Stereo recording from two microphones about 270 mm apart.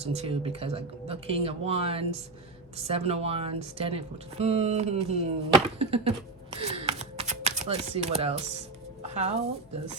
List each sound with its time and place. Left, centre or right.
0.0 s speech: right
9.0 s music: right